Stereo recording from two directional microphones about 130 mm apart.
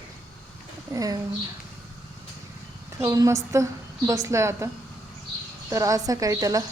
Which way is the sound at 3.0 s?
25° right (ahead or behind).